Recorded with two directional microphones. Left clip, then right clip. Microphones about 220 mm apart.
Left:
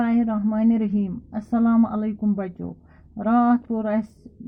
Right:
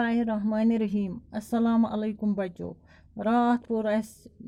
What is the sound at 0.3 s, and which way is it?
A woman's voice, 50° right (ahead or behind).